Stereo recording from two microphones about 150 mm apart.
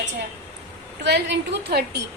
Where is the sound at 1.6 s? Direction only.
90° right.